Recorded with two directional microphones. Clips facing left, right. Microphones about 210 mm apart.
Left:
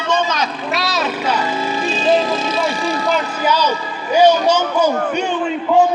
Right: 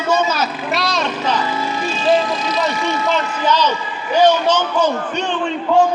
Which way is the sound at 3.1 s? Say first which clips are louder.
Even; 10° left (ahead or behind).